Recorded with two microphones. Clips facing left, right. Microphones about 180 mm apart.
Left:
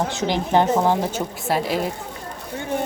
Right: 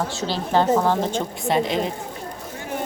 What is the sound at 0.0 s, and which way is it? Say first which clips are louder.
A woman's voice: left 3 dB; 20° left (ahead or behind).